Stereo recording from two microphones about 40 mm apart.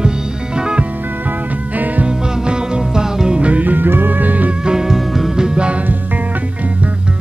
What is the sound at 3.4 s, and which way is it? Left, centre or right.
Music, right.